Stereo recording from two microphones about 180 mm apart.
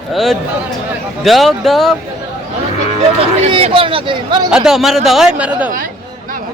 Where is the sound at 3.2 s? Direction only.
35° right (ahead or behind).